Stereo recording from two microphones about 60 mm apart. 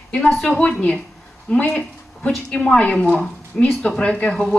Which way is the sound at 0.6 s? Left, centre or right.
Left.